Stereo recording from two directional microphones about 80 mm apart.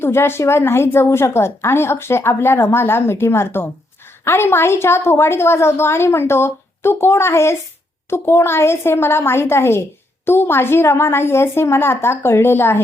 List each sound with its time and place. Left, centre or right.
0.0 s a woman's voice: left